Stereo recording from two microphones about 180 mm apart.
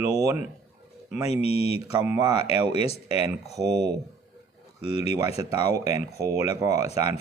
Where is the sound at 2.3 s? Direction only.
35° left (ahead or behind).